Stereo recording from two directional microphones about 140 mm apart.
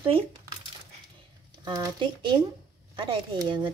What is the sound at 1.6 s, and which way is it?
Speech, 30° right (ahead or behind).